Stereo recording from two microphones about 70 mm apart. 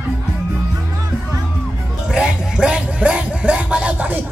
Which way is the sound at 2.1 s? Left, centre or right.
Centre.